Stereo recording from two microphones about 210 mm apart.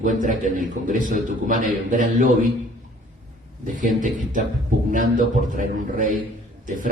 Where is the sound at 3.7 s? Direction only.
40° right (ahead or behind).